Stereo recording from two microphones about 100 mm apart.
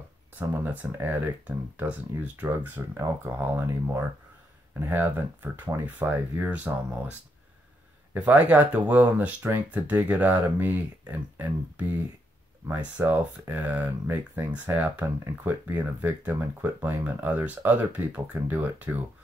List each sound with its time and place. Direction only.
0.4 s speech: 20° right (ahead or behind)